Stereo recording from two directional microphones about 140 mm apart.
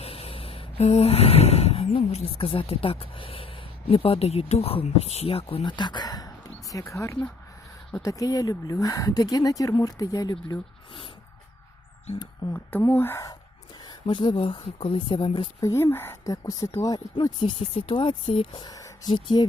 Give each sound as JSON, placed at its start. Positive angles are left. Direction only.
{"t": 0.0, "sound": "a sound", "side_deg": 45}
{"t": 2.3, "sound": "speech", "side_deg": 40}
{"t": 12.4, "sound": "speech", "side_deg": 35}
{"t": 12.8, "sound": "speech", "side_deg": 15}
{"t": 13.8, "sound": "speech", "side_deg": 35}
{"t": 15.6, "sound": "speech", "side_deg": 20}
{"t": 18.6, "sound": "speech", "side_deg": 25}